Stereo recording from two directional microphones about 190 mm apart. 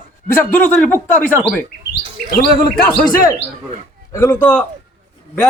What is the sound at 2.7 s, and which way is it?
Speech, centre (ahead or behind).